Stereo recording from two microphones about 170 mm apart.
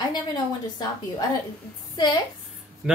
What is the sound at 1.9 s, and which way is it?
Speech, 25° left (ahead or behind).